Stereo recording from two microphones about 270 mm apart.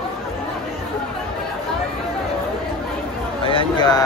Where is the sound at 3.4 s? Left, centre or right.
Centre.